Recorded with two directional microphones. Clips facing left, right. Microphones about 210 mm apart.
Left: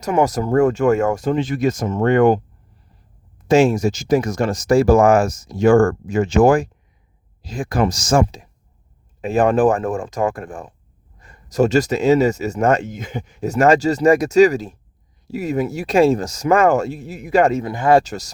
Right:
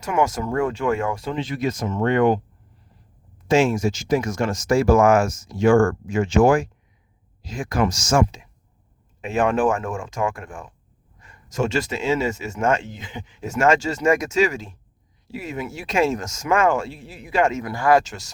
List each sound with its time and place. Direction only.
0.0 s speech: 35° left (ahead or behind)
3.4 s speech: 40° left (ahead or behind)
17.7 s speech: 25° left (ahead or behind)
18.0 s speech: 40° left (ahead or behind)